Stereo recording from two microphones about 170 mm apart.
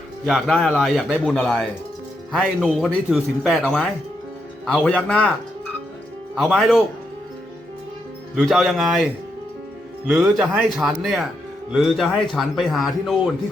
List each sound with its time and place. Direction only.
0.3 s a man's voice: centre (ahead or behind)
6.3 s a man's voice: centre (ahead or behind)
8.4 s a man's voice: centre (ahead or behind)
10.1 s a man's voice: 5° right (ahead or behind)